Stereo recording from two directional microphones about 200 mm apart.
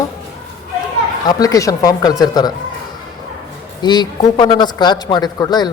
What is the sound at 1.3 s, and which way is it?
A man's voice, 20° left (ahead or behind).